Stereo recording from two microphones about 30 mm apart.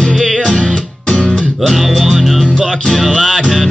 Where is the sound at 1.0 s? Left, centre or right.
Left.